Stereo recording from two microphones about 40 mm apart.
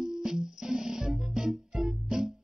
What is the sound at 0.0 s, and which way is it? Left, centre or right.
Music, centre.